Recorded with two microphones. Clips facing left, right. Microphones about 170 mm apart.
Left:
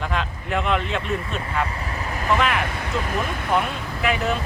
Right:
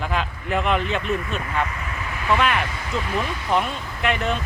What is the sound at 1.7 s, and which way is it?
Vehicle, 35° left (ahead or behind).